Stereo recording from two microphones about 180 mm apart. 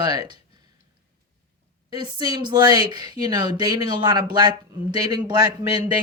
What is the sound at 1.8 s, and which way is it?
Speech, 25° right (ahead or behind).